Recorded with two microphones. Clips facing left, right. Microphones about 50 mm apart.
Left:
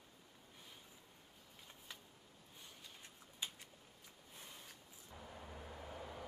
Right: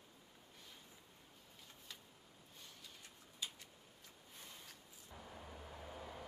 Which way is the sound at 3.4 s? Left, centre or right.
Left.